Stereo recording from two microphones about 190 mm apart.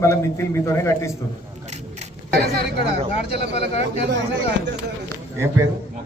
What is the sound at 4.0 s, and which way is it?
Speech, 70° right (ahead or behind).